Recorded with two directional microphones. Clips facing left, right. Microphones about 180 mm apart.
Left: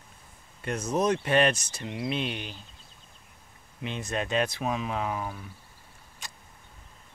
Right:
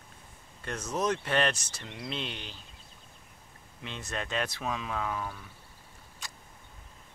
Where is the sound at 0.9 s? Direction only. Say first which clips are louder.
Left 5 dB; 15° left (ahead or behind).